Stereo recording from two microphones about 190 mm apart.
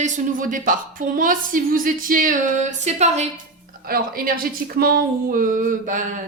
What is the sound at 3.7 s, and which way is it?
Speech, 50° right (ahead or behind).